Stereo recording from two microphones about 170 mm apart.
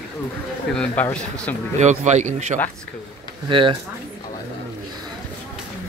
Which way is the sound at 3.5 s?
30° right (ahead or behind).